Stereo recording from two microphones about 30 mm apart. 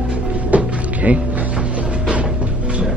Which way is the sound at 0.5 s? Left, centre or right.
Right.